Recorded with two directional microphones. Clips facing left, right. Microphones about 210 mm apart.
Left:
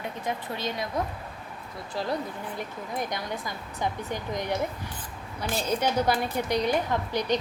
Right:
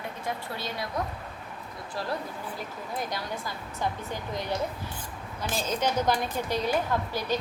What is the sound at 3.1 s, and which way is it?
A woman's voice, 15° left (ahead or behind).